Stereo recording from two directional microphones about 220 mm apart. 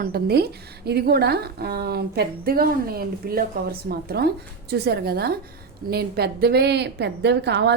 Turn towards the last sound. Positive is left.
turn(degrees=-50)  # may be behind; listen again after turning